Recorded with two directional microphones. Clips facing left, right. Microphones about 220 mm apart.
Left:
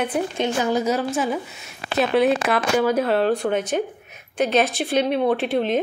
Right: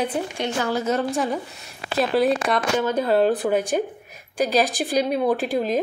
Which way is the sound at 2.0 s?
Centre (ahead or behind).